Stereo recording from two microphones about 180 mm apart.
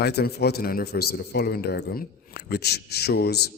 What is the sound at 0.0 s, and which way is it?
A man's voice, 60° left (ahead or behind).